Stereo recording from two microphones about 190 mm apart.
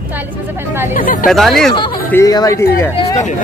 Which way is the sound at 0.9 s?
45° left (ahead or behind).